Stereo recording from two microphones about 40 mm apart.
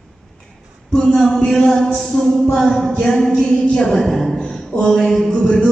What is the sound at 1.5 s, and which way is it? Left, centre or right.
A woman's voice, centre.